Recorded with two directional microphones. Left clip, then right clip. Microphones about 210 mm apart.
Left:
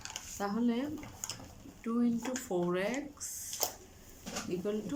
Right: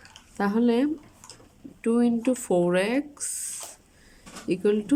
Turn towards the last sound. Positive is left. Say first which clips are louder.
# right 13 dB
turn(degrees=-50)  # may be behind; listen again after turning